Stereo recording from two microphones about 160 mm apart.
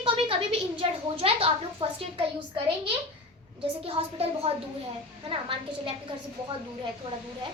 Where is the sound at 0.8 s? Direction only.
35° right (ahead or behind).